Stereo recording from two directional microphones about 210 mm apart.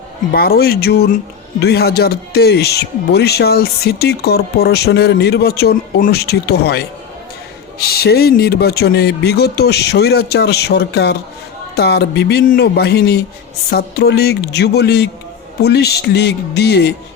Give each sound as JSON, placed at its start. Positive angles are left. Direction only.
{"t": 0.3, "sound": "speech", "side_deg": 45}